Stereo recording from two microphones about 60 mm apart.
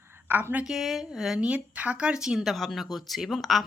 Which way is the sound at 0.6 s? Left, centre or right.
Centre.